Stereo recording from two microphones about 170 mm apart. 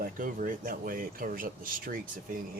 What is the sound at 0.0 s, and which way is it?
Speech, 55° right (ahead or behind).